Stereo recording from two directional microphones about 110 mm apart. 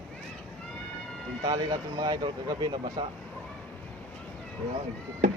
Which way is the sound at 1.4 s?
35° right (ahead or behind).